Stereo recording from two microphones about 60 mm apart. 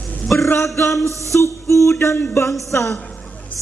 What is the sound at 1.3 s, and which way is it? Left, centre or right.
Music, left.